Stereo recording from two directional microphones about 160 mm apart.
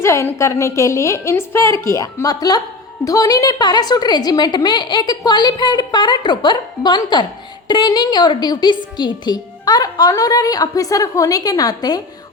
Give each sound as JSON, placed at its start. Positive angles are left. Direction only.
{"t": 0.0, "sound": "a woman's voice", "side_deg": 15}